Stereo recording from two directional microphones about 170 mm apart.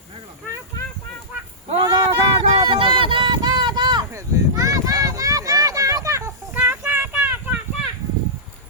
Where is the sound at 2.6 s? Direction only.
30° right (ahead or behind); by 7.6 s 10° right (ahead or behind).